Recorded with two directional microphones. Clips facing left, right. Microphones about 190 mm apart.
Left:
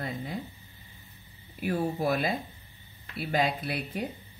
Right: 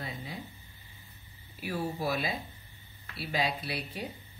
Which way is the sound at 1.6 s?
50° left (ahead or behind).